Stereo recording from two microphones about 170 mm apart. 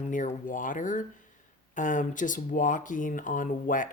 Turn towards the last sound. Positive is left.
turn(degrees=50)  # may be behind; listen again after turning